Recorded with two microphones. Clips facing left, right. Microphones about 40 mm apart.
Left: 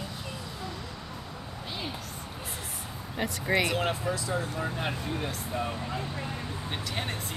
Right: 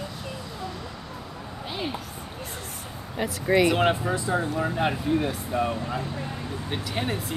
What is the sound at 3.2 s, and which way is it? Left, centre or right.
Speech, centre.